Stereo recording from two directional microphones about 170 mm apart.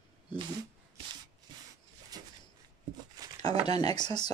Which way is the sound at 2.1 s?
20° right (ahead or behind).